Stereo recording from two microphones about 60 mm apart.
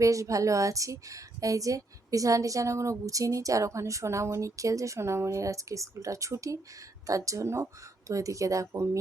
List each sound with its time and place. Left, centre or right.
0.0 s a woman's voice: right
8.7 s speech: right